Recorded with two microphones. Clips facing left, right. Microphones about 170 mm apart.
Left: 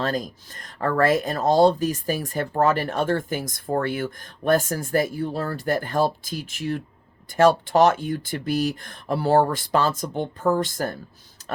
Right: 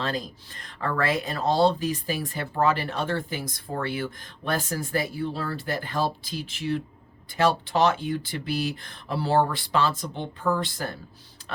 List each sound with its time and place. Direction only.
0.0 s speech: 45° left (ahead or behind)